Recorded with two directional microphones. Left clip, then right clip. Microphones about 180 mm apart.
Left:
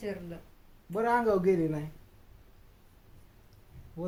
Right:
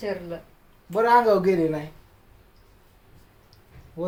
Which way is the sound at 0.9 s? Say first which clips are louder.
Right 9 dB; 35° left (ahead or behind).